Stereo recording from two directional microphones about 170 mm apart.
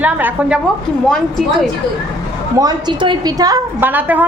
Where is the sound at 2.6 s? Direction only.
25° right (ahead or behind).